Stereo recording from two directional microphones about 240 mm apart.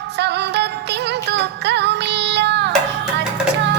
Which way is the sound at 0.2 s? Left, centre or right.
Right.